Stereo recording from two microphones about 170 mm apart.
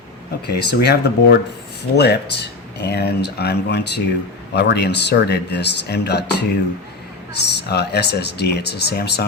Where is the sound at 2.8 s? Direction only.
70° left (ahead or behind).